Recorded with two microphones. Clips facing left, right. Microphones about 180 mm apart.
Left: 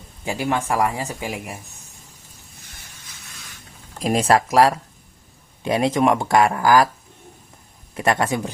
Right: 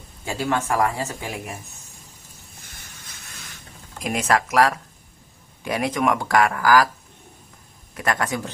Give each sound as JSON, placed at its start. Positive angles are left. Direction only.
{"t": 0.3, "sound": "speech", "side_deg": 15}
{"t": 4.0, "sound": "speech", "side_deg": 30}
{"t": 7.9, "sound": "speech", "side_deg": 25}